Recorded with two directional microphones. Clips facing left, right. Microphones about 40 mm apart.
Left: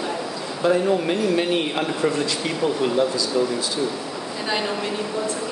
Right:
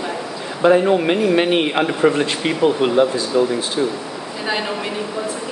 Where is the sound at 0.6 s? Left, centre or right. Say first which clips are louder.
Right 6 dB; right.